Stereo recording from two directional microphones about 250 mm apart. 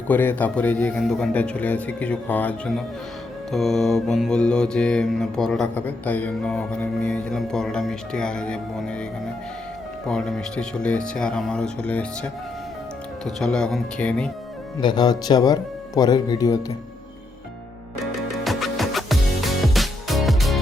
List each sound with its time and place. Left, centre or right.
0.1 s mantra: centre
10.1 s mantra: centre
14.8 s speech: centre
18.0 s music: centre